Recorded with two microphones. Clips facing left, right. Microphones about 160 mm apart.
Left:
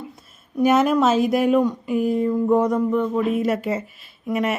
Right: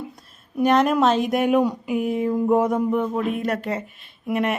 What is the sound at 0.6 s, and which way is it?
Speech, 5° left (ahead or behind).